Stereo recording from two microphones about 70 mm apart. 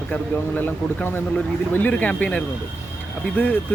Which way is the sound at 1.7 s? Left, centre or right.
Left.